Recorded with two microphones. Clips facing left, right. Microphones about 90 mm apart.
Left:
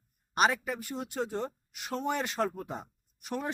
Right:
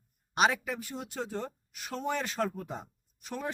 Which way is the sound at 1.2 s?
15° left (ahead or behind).